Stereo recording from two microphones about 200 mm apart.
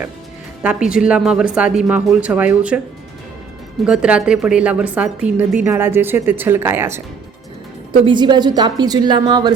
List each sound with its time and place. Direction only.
0.6 s a woman's voice: 5° right (ahead or behind)
3.8 s a woman's voice: 5° right (ahead or behind)
8.0 s a woman's voice: 20° right (ahead or behind)